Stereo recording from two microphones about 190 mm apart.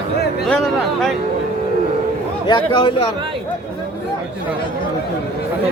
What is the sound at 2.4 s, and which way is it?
Speech, 25° left (ahead or behind).